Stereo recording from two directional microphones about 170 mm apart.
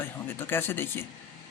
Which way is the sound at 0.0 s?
10° left (ahead or behind).